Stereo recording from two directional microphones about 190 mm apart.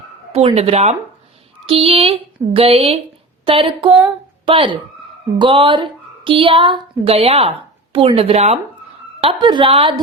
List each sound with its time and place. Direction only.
0.3 s a woman's voice: 30° right (ahead or behind)